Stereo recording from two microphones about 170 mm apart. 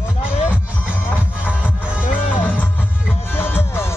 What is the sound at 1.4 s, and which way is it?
Music, 5° right (ahead or behind).